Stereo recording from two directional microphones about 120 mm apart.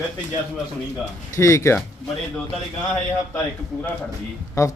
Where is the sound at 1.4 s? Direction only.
25° left (ahead or behind).